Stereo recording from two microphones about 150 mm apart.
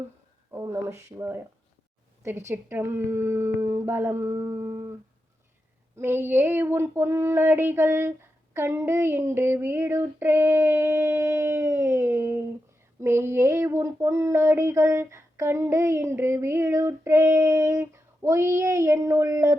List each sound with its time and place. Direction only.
0.5 s female singing: 15° right (ahead or behind)
6.0 s female singing: 15° right (ahead or behind)
13.0 s a sound: 15° right (ahead or behind)